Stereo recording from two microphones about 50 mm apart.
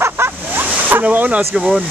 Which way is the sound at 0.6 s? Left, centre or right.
Right.